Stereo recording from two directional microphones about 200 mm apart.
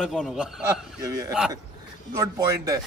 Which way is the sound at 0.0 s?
Centre (ahead or behind).